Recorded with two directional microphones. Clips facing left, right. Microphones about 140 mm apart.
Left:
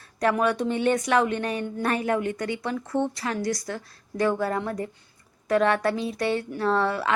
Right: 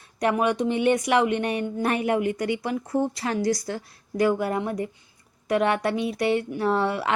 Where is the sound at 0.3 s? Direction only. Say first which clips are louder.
Right 1 dB; 15° right (ahead or behind); by 3.8 s 30° right (ahead or behind).